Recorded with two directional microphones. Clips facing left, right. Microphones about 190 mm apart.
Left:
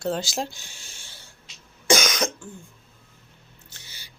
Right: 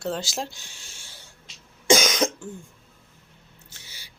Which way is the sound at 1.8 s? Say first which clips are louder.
Right 2 dB; 25° right (ahead or behind).